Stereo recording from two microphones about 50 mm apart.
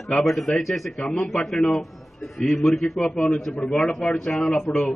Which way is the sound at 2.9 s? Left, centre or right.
Left.